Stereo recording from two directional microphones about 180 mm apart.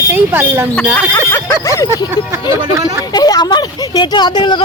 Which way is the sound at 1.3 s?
15° left (ahead or behind).